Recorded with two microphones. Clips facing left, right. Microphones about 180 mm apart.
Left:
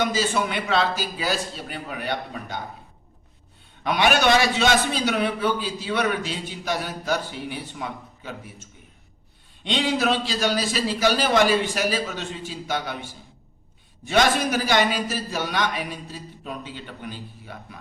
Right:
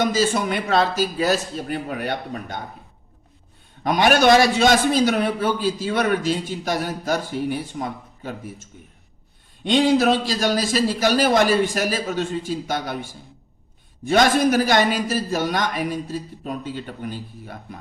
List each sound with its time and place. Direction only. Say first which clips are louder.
0.0 s a man's voice: right 3 dB; 40° right (ahead or behind)
3.8 s a man's voice: right 4 dB; 45° right (ahead or behind)
9.6 s a man's voice: right 6 dB; 45° right (ahead or behind)
14.0 s a man's voice: right 4 dB; 45° right (ahead or behind)